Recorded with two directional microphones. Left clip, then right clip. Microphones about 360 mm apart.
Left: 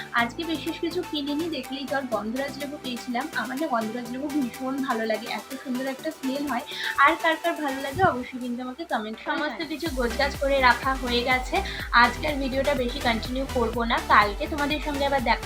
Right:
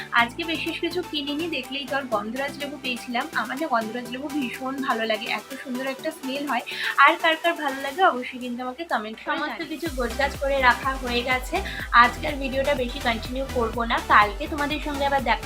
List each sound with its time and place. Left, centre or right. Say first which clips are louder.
0.4 s speech: right 2 dB; centre
4.9 s speech: right 4 dB; centre